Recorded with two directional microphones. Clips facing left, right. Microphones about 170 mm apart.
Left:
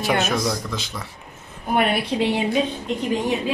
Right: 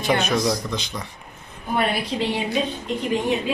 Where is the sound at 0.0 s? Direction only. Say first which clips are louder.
Right 1 dB; 5° left (ahead or behind).